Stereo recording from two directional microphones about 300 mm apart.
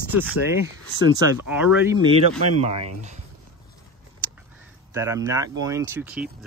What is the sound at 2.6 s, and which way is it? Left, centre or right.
Speech, right.